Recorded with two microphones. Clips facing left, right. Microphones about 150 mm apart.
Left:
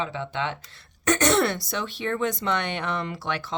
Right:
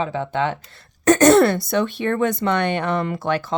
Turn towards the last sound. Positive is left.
turn(degrees=-45)  # may be behind; listen again after turning